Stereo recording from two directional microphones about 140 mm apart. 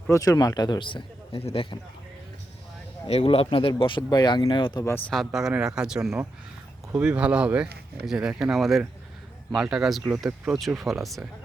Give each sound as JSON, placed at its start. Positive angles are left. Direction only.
{"t": 0.1, "sound": "speech", "side_deg": 25}
{"t": 3.1, "sound": "speech", "side_deg": 45}
{"t": 4.9, "sound": "speech", "side_deg": 15}
{"t": 5.1, "sound": "speech", "side_deg": 0}